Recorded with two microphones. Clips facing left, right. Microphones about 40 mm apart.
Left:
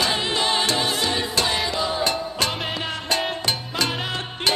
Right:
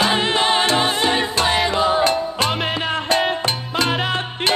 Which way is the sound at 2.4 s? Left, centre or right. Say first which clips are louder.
Right 6 dB; right.